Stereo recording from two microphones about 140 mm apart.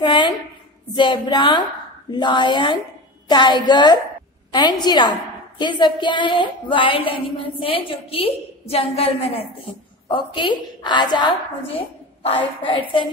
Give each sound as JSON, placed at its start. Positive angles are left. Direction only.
{"t": 0.0, "sound": "a sound", "side_deg": 35}
{"t": 0.9, "sound": "a woman's voice", "side_deg": 30}
{"t": 10.0, "sound": "a woman's voice", "side_deg": 35}